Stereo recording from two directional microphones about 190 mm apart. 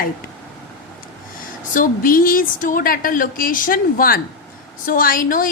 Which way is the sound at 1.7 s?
45° left (ahead or behind).